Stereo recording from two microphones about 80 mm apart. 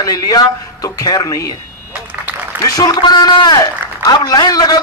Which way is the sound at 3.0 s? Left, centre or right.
Left.